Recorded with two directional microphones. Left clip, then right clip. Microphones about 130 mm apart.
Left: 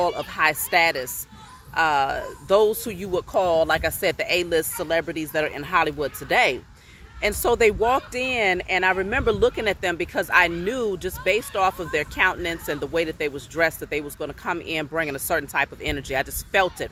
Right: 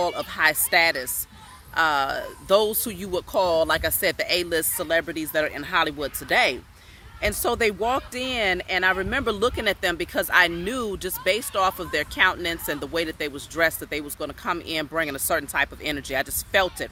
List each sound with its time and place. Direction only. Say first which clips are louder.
0.3 s speech: even; 25° right (ahead or behind)